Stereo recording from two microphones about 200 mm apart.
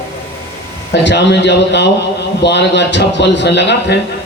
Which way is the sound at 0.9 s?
60° left (ahead or behind).